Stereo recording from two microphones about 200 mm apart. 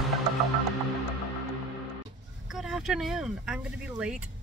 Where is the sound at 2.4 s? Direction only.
5° right (ahead or behind).